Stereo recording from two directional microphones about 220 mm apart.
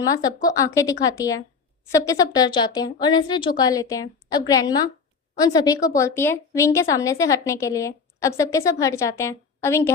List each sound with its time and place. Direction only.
0.4 s a woman's voice: 15° left (ahead or behind)